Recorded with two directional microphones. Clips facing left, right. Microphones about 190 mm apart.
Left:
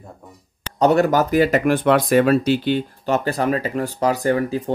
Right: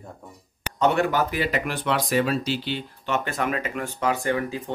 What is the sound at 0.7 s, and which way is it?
Speech, 40° left (ahead or behind).